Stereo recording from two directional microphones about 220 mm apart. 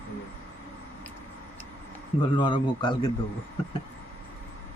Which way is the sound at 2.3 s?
20° left (ahead or behind).